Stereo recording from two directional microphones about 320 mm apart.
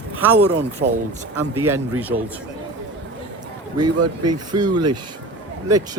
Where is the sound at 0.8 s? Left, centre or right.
Right.